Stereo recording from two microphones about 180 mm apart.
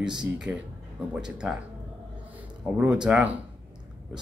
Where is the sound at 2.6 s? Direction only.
15° right (ahead or behind).